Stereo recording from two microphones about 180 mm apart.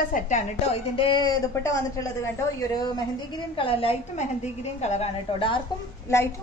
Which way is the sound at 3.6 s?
30° left (ahead or behind).